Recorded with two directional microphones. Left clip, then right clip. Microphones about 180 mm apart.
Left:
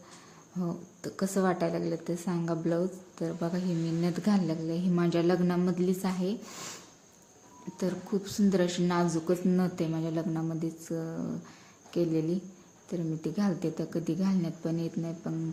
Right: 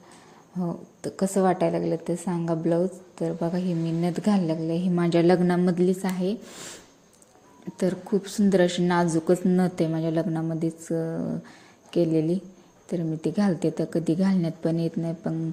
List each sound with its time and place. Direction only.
0.6 s a woman's voice: 20° right (ahead or behind)
7.8 s a woman's voice: 25° right (ahead or behind)